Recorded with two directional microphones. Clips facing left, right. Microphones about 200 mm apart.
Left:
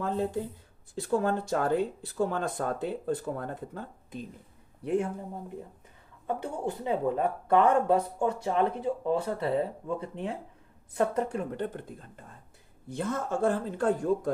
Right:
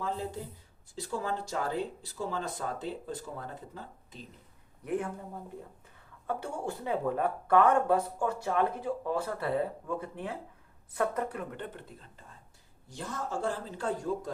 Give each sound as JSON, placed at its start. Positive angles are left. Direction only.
{"t": 0.9, "sound": "speech", "side_deg": 55}
{"t": 4.8, "sound": "speech", "side_deg": 25}
{"t": 11.6, "sound": "speech", "side_deg": 45}